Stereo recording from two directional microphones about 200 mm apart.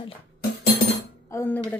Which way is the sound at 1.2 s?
10° left (ahead or behind).